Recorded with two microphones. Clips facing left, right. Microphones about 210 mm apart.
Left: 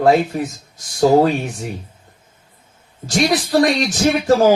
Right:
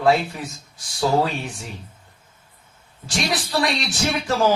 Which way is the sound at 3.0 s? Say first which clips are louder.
Left 8 dB; 45° left (ahead or behind).